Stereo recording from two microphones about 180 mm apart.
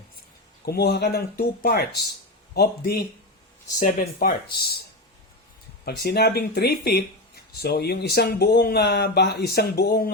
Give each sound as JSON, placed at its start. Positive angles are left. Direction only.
{"t": 0.6, "sound": "speech", "side_deg": 60}
{"t": 5.8, "sound": "speech", "side_deg": 60}